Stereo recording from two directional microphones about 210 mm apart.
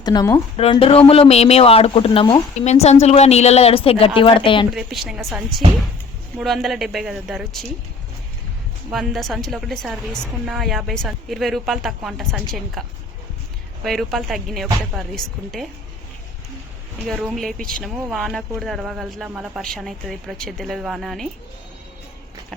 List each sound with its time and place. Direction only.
0.0 s speech: 20° left (ahead or behind)
0.5 s speech: 25° left (ahead or behind)
4.7 s a woman's voice: centre (ahead or behind)
8.9 s a woman's voice: centre (ahead or behind)
13.8 s a woman's voice: centre (ahead or behind)
17.1 s a woman's voice: centre (ahead or behind)